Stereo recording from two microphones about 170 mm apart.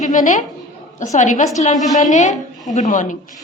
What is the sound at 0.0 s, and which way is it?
A woman's voice, 50° left (ahead or behind).